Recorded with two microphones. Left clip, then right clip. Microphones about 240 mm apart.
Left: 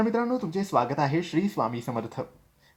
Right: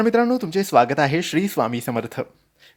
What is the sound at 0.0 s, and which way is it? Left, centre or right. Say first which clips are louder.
Speech: right 8 dB; right.